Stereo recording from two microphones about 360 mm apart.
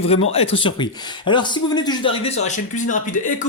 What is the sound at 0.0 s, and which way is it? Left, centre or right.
Speech, centre.